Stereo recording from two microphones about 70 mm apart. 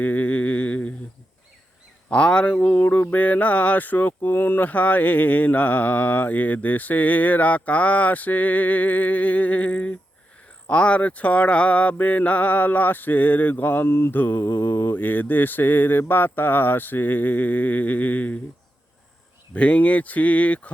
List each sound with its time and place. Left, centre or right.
0.0 s a sound: left
2.0 s speech: centre
3.0 s mantra: left
19.5 s mantra: centre